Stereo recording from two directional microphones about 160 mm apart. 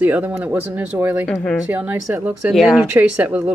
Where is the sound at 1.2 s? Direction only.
5° left (ahead or behind).